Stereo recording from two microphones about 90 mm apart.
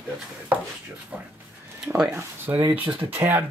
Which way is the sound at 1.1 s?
15° right (ahead or behind).